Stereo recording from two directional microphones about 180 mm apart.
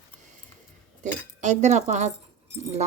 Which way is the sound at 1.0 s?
40° right (ahead or behind).